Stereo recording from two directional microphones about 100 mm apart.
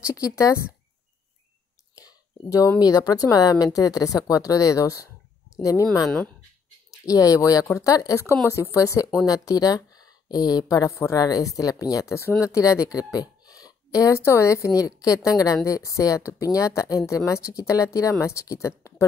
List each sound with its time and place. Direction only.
0.1 s speech: 30° left (ahead or behind)
2.0 s a sound: 35° left (ahead or behind)
2.8 s speech: 40° left (ahead or behind)
7.1 s speech: 35° left (ahead or behind)